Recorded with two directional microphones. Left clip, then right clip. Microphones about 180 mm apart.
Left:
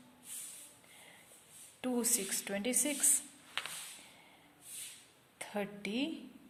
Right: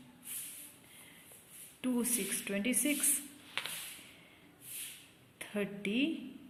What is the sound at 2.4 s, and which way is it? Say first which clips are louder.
Speech: right 3 dB; 50° left (ahead or behind).